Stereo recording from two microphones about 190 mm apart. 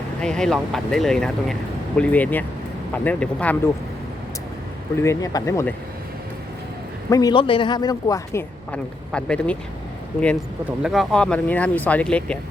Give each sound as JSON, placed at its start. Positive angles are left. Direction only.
{"t": 0.2, "sound": "speech", "side_deg": 5}
{"t": 4.9, "sound": "speech", "side_deg": 15}
{"t": 7.1, "sound": "speech", "side_deg": 20}
{"t": 10.8, "sound": "speech", "side_deg": 0}